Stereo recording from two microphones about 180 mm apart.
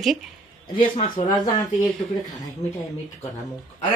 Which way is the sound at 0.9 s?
25° left (ahead or behind).